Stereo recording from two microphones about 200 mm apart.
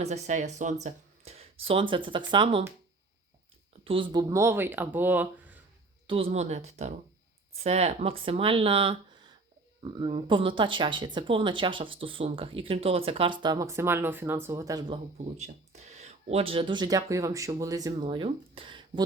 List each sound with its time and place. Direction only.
0.0 s speech: 35° right (ahead or behind)
3.8 s speech: 25° right (ahead or behind); by 5.5 s 10° right (ahead or behind)
6.1 s speech: 30° right (ahead or behind)
15.2 s speech: 35° right (ahead or behind)